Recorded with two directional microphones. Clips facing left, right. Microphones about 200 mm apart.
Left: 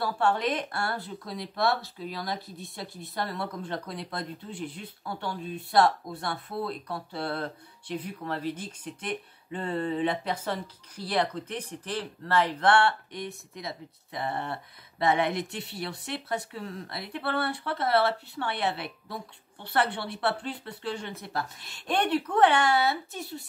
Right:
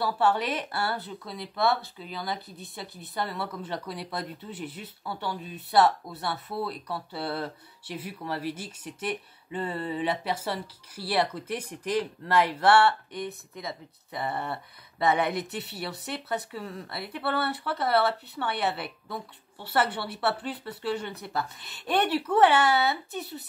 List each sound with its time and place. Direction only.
0.0 s speech: 5° right (ahead or behind)